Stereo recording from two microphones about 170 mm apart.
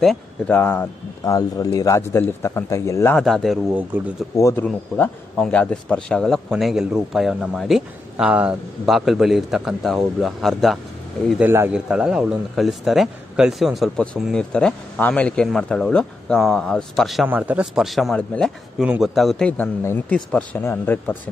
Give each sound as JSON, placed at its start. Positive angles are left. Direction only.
{"t": 0.0, "sound": "speech", "side_deg": 5}
{"t": 1.2, "sound": "speech", "side_deg": 20}
{"t": 3.2, "sound": "speech", "side_deg": 0}
{"t": 3.9, "sound": "speech", "side_deg": -10}
{"t": 4.4, "sound": "speech", "side_deg": 15}
{"t": 4.6, "sound": "speech", "side_deg": 5}